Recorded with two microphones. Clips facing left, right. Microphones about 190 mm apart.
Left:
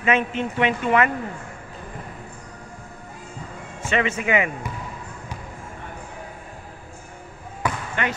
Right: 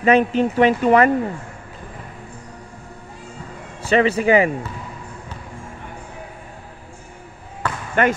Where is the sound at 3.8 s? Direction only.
35° right (ahead or behind).